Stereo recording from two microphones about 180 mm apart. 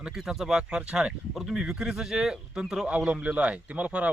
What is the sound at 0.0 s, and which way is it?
A man's voice, 5° right (ahead or behind).